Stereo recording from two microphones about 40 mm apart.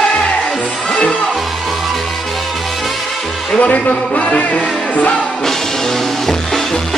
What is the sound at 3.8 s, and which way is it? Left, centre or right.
Music, left.